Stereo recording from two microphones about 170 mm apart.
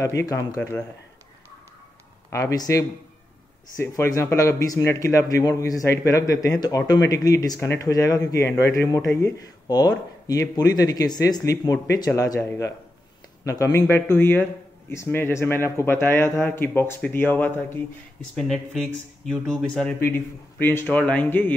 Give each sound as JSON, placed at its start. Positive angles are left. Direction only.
{"t": 0.0, "sound": "speech", "side_deg": 20}
{"t": 0.6, "sound": "a man's voice", "side_deg": 10}
{"t": 2.3, "sound": "speech", "side_deg": 20}
{"t": 13.7, "sound": "a man's voice", "side_deg": 15}
{"t": 18.3, "sound": "a man's voice", "side_deg": 0}